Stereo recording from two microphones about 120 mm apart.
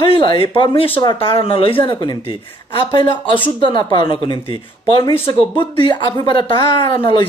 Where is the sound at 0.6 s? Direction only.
50° left (ahead or behind).